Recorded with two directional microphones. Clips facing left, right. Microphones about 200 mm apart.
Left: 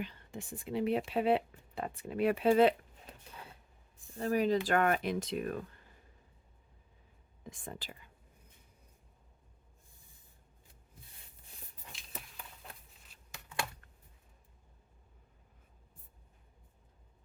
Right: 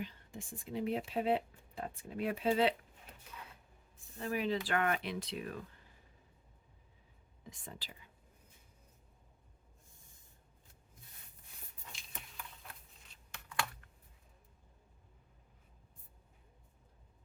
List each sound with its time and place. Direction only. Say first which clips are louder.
0.0 s speech: left 3 dB; 70° left (ahead or behind)
2.5 s speech: left 6 dB; 50° left (ahead or behind)
3.2 s cupboard open or close: left 1 dB; 30° left (ahead or behind)
4.2 s speech: left 6 dB; 40° left (ahead or behind)
7.4 s speech: left 5 dB; 50° left (ahead or behind)
11.9 s a sound: left 3 dB; centre (ahead or behind)